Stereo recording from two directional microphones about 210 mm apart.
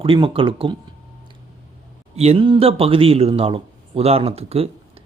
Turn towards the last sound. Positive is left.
turn(degrees=-30)  # may be behind; listen again after turning